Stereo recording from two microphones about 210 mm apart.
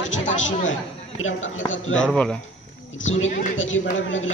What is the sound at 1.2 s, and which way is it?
Speech, 65° left (ahead or behind).